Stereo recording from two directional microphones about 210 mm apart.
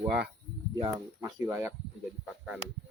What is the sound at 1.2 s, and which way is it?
Speech, 15° right (ahead or behind).